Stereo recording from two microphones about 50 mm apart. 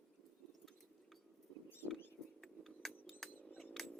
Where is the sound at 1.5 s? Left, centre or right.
Centre.